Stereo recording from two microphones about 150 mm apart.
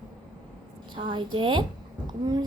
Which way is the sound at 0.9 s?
30° right (ahead or behind).